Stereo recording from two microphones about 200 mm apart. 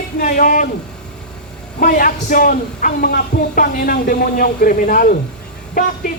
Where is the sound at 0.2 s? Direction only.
45° left (ahead or behind).